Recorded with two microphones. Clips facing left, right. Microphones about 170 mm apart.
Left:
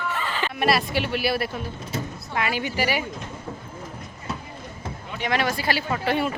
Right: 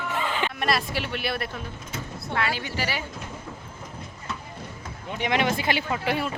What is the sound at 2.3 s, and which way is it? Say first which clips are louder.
Speech: left 2 dB; 15° left (ahead or behind).